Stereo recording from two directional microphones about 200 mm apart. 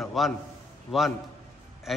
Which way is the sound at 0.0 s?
Centre (ahead or behind).